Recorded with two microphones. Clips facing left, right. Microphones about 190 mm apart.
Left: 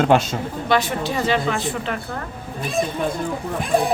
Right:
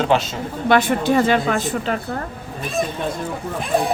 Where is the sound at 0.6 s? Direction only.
55° right (ahead or behind).